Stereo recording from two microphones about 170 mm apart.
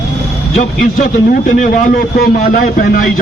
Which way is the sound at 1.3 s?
50° left (ahead or behind).